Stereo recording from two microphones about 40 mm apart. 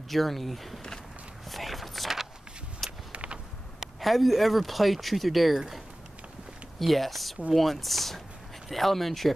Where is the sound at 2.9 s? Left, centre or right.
Right.